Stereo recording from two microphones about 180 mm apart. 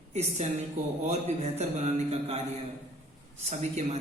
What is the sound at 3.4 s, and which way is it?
Mantra, 40° right (ahead or behind).